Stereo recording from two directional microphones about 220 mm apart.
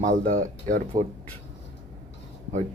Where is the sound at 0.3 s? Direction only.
35° right (ahead or behind).